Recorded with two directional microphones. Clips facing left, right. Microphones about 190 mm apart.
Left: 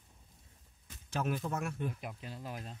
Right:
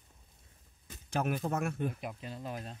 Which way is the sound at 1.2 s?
50° right (ahead or behind).